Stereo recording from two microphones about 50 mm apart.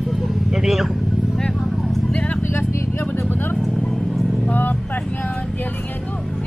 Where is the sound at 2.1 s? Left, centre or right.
Left.